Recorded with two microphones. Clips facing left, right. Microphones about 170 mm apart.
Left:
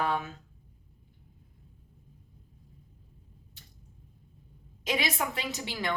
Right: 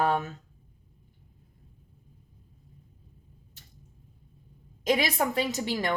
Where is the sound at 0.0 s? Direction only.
45° right (ahead or behind).